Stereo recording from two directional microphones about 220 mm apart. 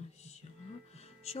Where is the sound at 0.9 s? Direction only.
30° left (ahead or behind).